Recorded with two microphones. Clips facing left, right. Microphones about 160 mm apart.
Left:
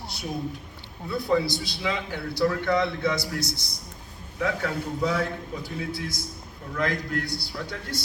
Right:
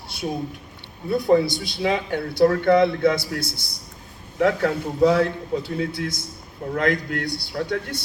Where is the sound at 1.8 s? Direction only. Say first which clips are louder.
Right 7 dB; 55° right (ahead or behind).